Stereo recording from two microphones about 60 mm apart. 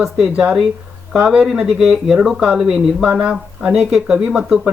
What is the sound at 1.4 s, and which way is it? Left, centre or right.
Speech, centre.